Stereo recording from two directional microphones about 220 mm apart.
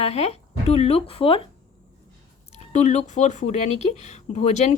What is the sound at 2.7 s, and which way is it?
Speech, 30° left (ahead or behind).